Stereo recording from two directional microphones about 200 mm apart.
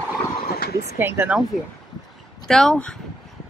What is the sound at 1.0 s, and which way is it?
Speech, 10° right (ahead or behind).